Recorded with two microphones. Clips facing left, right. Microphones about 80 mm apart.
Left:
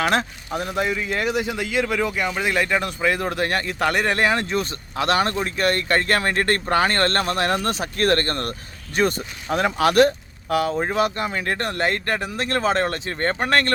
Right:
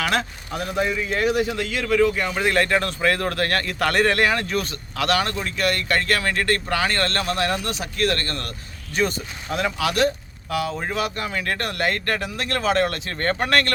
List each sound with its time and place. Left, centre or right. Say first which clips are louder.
0.0 s speech: left 2 dB; left; by 1.2 s centre
1.2 s speech: right 5 dB; centre; by 10.8 s left
10.8 s speech: left 4 dB; left